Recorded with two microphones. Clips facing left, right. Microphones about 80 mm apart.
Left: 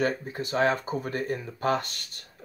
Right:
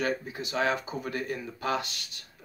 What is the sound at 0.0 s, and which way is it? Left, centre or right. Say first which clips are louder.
Speech: left 3 dB; left.